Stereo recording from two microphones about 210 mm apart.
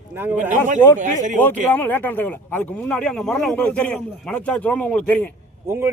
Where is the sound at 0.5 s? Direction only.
35° right (ahead or behind).